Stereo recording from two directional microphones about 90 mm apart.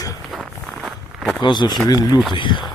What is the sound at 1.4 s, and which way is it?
Speech, 55° left (ahead or behind).